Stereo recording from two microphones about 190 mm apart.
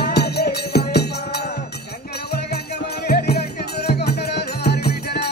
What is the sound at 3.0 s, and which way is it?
Music, 55° left (ahead or behind).